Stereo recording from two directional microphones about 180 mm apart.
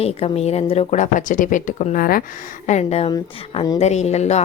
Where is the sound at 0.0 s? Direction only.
35° left (ahead or behind); by 2.2 s 55° left (ahead or behind).